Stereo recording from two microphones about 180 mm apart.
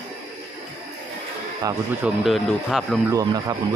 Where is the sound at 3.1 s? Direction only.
20° right (ahead or behind).